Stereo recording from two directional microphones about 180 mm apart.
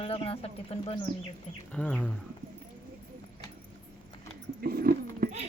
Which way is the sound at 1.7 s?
5° left (ahead or behind).